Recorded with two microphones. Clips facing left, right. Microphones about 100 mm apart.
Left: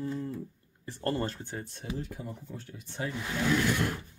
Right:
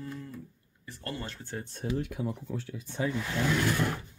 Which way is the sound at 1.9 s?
75° right (ahead or behind).